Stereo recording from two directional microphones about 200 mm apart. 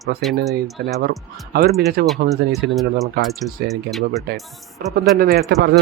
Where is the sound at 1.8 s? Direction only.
50° right (ahead or behind).